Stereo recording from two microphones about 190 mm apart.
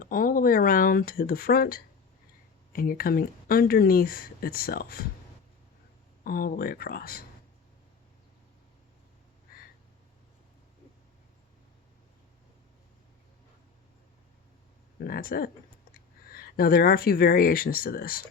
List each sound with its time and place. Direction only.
0.0 s speech: 45° left (ahead or behind)
6.2 s speech: 50° left (ahead or behind)
9.5 s a sound: 50° left (ahead or behind)
14.9 s speech: 50° left (ahead or behind)